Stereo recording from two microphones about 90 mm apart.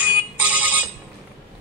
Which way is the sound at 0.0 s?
15° right (ahead or behind).